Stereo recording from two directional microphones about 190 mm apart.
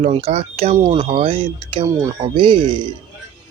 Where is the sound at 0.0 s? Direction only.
30° right (ahead or behind).